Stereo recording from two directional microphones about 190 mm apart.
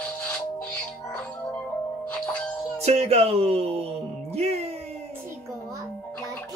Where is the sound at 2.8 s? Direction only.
35° right (ahead or behind).